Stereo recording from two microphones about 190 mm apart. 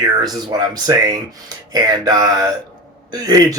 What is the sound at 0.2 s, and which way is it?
Speech, 20° right (ahead or behind).